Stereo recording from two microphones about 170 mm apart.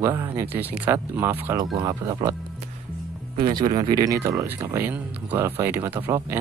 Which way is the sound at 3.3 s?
25° right (ahead or behind).